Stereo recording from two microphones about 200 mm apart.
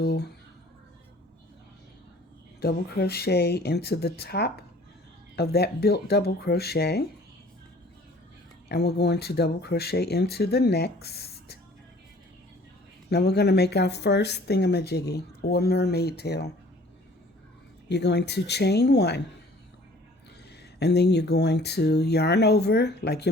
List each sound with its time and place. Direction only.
0.0 s speech: 50° left (ahead or behind)
2.6 s speech: 50° left (ahead or behind)
8.7 s speech: 55° left (ahead or behind)
13.1 s speech: 55° left (ahead or behind)
17.8 s speech: 55° left (ahead or behind)
20.7 s speech: 55° left (ahead or behind)